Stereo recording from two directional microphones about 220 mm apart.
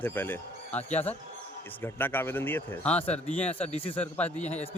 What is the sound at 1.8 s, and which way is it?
A man's voice, 10° left (ahead or behind).